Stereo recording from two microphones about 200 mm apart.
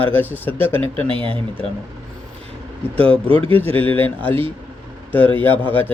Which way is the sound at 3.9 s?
10° left (ahead or behind).